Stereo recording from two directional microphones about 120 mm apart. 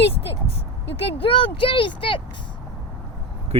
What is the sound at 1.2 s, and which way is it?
Speech, 50° left (ahead or behind).